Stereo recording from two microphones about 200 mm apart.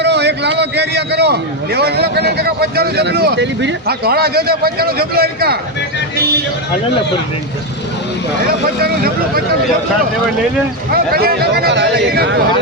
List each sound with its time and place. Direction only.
0.0 s a man's voice: 60° right (ahead or behind)
8.8 s a man's voice: 50° right (ahead or behind)
10.9 s a man's voice: 50° right (ahead or behind)